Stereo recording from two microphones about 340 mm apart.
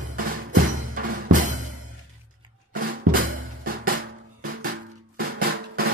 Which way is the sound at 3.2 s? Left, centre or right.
Right.